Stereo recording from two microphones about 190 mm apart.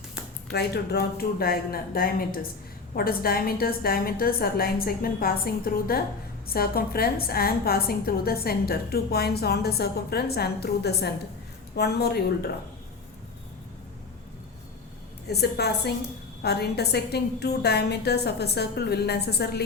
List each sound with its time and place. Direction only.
0.5 s a woman's voice: 55° left (ahead or behind)
15.3 s a woman's voice: 60° left (ahead or behind)